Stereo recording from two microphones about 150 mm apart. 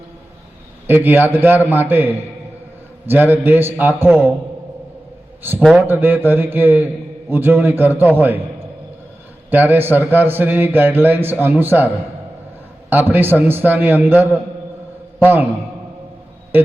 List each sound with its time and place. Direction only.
0.9 s a man's voice: 15° right (ahead or behind)
5.4 s a man's voice: 15° right (ahead or behind)
9.5 s a man's voice: 10° right (ahead or behind)
12.9 s a man's voice: 15° right (ahead or behind)